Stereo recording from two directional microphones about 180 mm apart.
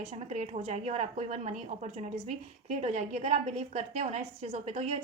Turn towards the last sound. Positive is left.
turn(degrees=-35)  # may be behind; listen again after turning